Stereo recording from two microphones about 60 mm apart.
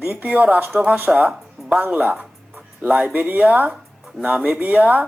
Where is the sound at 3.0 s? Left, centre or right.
Centre.